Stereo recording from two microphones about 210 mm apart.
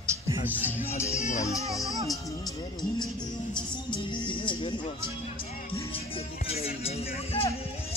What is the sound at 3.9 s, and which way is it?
Music, 25° left (ahead or behind).